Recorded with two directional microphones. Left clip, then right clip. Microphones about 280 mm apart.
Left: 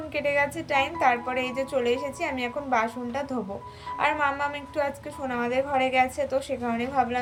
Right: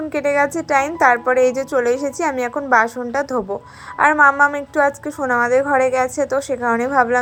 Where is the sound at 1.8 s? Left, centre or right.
Centre.